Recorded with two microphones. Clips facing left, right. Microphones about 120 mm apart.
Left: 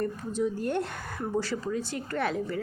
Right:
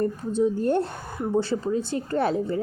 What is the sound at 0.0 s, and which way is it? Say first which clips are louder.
A woman's voice: right 6 dB; 30° right (ahead or behind).